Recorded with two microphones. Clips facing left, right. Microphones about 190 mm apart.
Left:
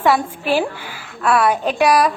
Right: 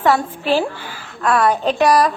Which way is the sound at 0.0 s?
10° left (ahead or behind).